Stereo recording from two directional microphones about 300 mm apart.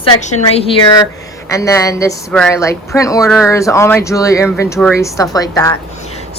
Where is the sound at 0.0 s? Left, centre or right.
Left.